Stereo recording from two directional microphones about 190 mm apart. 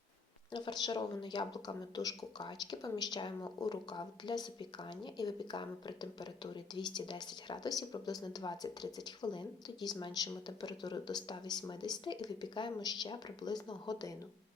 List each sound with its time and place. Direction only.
0.5 s speech: 25° left (ahead or behind)